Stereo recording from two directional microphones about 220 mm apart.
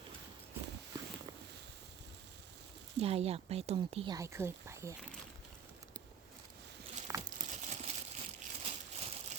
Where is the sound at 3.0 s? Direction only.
25° right (ahead or behind).